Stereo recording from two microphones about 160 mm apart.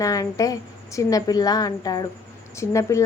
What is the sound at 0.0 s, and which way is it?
A woman's voice, 20° left (ahead or behind).